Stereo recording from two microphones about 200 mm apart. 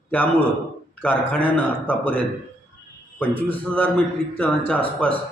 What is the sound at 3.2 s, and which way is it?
A man's voice, 10° left (ahead or behind).